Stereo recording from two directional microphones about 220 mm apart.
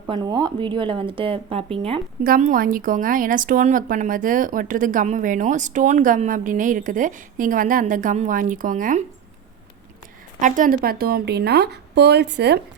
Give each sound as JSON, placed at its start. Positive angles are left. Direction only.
{"t": 0.1, "sound": "a woman's voice", "side_deg": -20}
{"t": 2.2, "sound": "a woman's voice", "side_deg": -40}
{"t": 10.4, "sound": "a woman's voice", "side_deg": -35}